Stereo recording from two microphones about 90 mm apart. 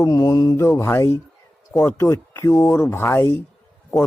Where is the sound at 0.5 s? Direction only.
30° left (ahead or behind).